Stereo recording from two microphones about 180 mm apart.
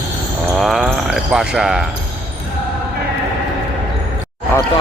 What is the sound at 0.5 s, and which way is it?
Basketball bounce, centre (ahead or behind).